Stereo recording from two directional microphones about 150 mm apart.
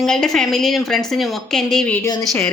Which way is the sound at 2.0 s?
20° left (ahead or behind).